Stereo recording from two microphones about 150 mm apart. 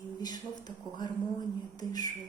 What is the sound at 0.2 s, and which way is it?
Speech, 25° left (ahead or behind).